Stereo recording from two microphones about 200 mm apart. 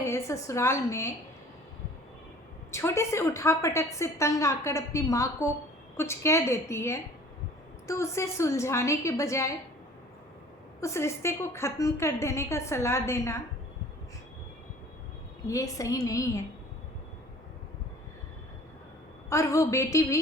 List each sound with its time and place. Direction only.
0.0 s a woman's voice: 15° left (ahead or behind)
2.7 s a woman's voice: 15° left (ahead or behind)
10.8 s a woman's voice: 15° left (ahead or behind)
15.4 s a woman's voice: 15° left (ahead or behind)
19.3 s a woman's voice: 15° left (ahead or behind)